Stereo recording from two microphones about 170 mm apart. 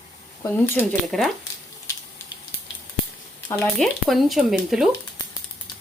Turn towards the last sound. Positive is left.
turn(degrees=0)  # may be behind; listen again after turning